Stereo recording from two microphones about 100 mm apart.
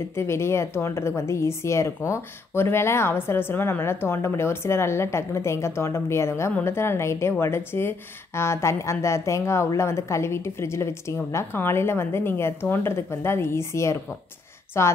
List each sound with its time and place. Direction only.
0.1 s a woman's voice: 25° left (ahead or behind)